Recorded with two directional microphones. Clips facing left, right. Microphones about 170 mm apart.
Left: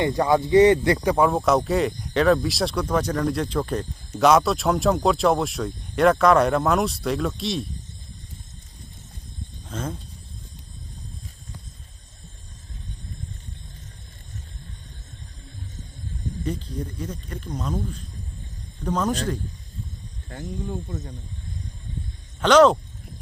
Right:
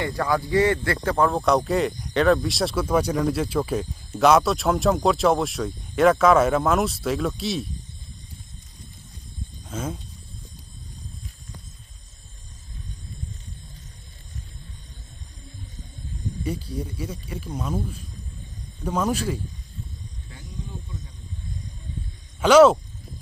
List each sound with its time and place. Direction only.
0.0 s speech: 20° left (ahead or behind); by 7.6 s centre (ahead or behind)
9.6 s speech: 5° right (ahead or behind)
16.4 s speech: 10° right (ahead or behind)
20.3 s speech: 55° left (ahead or behind)
22.4 s speech: 10° right (ahead or behind)